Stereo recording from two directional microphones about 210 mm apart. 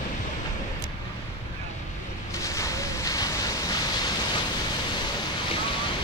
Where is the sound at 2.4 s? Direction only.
15° left (ahead or behind).